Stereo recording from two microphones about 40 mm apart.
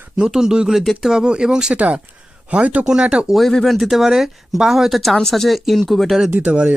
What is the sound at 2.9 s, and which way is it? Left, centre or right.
Speech, centre.